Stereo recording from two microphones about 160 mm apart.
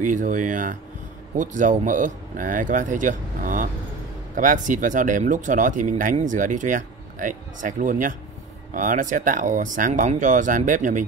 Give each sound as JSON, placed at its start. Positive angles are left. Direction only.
{"t": 0.0, "sound": "speech", "side_deg": -55}